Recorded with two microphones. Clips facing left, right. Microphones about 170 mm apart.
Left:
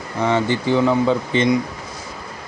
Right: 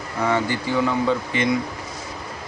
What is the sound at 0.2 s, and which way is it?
Speech, 25° left (ahead or behind).